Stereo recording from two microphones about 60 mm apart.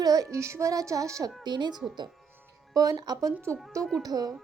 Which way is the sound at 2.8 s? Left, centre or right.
Right.